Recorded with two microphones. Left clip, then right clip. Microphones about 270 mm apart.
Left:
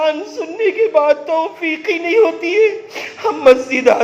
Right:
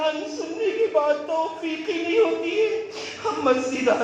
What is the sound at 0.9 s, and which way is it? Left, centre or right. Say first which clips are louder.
Speech: left 9 dB; left.